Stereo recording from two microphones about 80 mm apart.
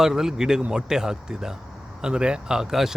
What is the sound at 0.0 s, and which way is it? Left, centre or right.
A man's voice, centre.